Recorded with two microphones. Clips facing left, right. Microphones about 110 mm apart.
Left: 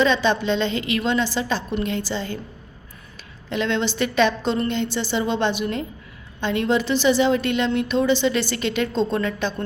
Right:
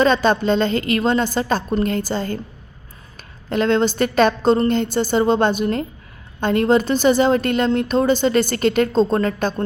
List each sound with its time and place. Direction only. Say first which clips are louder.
0.0 s a woman's voice: right 3 dB; 45° right (ahead or behind)
3.5 s a woman's voice: right 6 dB; 45° right (ahead or behind)